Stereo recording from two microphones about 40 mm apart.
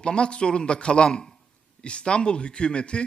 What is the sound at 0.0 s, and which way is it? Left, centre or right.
A man's voice, left.